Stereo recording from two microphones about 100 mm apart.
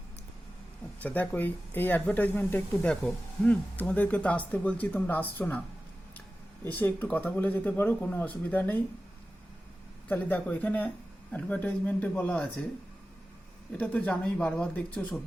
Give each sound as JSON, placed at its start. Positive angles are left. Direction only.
{"t": 1.0, "sound": "speech", "side_deg": 15}
{"t": 6.7, "sound": "speech", "side_deg": 15}
{"t": 10.1, "sound": "speech", "side_deg": 15}
{"t": 13.7, "sound": "speech", "side_deg": 15}